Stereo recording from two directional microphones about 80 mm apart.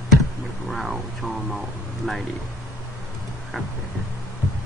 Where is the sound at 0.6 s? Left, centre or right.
Centre.